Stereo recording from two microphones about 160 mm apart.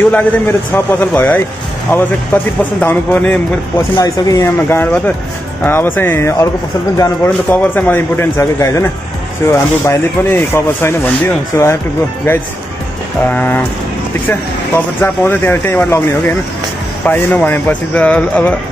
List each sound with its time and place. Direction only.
0.1 s speech: 10° left (ahead or behind)
3.9 s speech: 20° left (ahead or behind)
13.3 s speech: 10° left (ahead or behind)
15.0 s speech: 10° left (ahead or behind)